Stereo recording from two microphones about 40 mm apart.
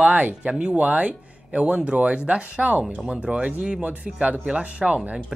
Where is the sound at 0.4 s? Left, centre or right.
Right.